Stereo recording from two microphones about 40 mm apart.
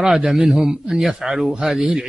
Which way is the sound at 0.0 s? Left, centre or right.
Centre.